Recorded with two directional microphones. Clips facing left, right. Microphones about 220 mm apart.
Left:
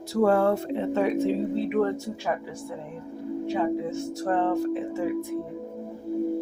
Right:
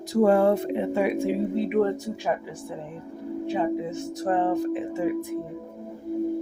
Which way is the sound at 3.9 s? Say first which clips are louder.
Right 1 dB; 15° right (ahead or behind).